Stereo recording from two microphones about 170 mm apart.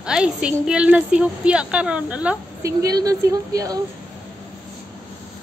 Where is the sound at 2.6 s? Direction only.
20° right (ahead or behind).